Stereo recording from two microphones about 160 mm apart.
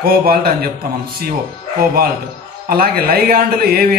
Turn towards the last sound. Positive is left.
turn(degrees=-65)  # may be behind; listen again after turning